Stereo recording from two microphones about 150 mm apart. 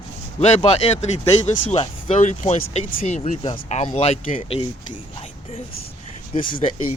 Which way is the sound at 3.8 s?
40° left (ahead or behind).